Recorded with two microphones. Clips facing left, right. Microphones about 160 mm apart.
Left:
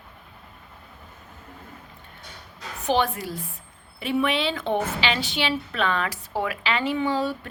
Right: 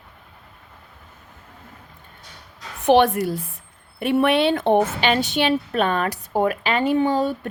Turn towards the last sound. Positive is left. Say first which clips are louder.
# right 5 dB
turn(degrees=-45)  # may be behind; listen again after turning